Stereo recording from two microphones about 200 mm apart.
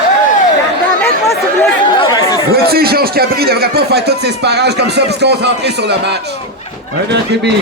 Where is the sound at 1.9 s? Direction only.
25° left (ahead or behind).